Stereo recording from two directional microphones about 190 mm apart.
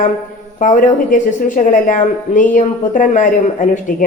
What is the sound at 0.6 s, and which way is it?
A man's voice, 40° left (ahead or behind).